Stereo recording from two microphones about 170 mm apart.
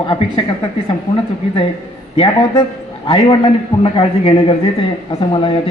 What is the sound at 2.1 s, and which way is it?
A man's voice, 30° left (ahead or behind).